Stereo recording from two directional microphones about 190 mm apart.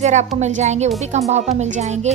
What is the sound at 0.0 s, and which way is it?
Speech, 35° right (ahead or behind).